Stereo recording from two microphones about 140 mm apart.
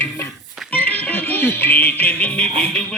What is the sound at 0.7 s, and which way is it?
Music, 10° left (ahead or behind).